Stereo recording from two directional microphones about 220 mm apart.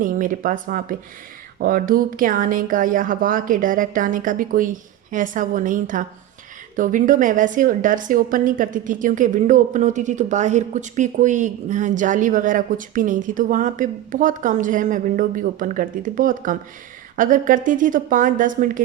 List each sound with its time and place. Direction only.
0.0 s a woman's voice: 35° right (ahead or behind)